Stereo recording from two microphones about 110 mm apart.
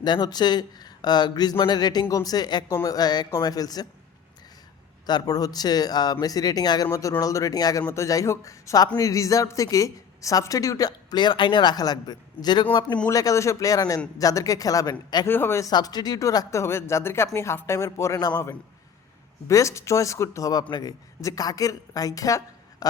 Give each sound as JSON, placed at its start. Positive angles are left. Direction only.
{"t": 0.0, "sound": "a woman's voice", "side_deg": 40}
{"t": 5.0, "sound": "a woman's voice", "side_deg": 35}
{"t": 13.1, "sound": "a woman's voice", "side_deg": 30}
{"t": 15.3, "sound": "speech", "side_deg": 20}
{"t": 15.7, "sound": "speech", "side_deg": 40}
{"t": 19.5, "sound": "a woman's voice", "side_deg": 30}